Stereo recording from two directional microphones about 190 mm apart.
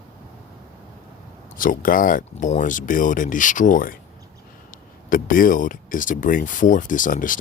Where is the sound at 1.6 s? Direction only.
45° left (ahead or behind).